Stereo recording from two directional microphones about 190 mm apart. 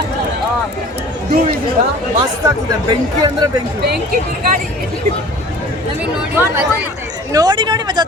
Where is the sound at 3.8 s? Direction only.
55° right (ahead or behind).